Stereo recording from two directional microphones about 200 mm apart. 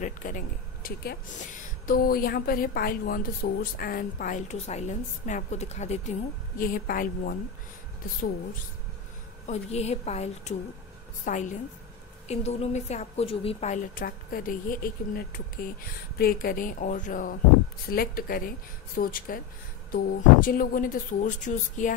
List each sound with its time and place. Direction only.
0.0 s a woman's voice: 40° left (ahead or behind)
6.6 s a woman's voice: 45° left (ahead or behind)
9.5 s a woman's voice: 35° left (ahead or behind)